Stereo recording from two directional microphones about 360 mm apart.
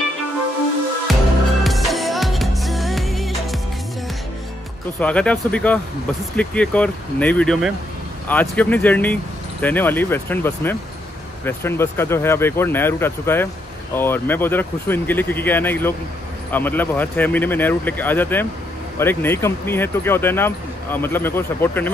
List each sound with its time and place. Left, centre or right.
1.1 s music: centre
5.0 s speech: centre